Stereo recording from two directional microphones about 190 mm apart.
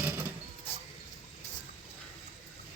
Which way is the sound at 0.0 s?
10° right (ahead or behind).